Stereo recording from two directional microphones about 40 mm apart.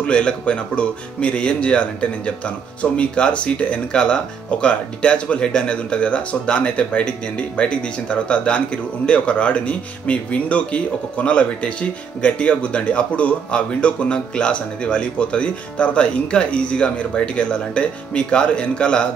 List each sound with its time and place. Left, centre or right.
0.0 s speech: left